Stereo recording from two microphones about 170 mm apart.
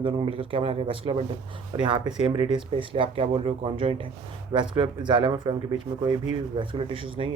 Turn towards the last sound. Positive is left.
turn(degrees=-30)  # may be behind; listen again after turning